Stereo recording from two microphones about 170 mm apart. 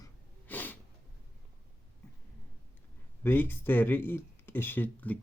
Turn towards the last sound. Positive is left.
turn(degrees=10)  # may be behind; listen again after turning